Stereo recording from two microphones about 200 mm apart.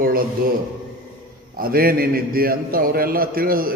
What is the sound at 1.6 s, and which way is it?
A man's voice, 45° right (ahead or behind).